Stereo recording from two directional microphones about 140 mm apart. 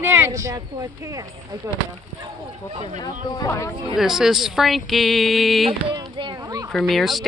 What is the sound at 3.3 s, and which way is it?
Speech, 25° left (ahead or behind).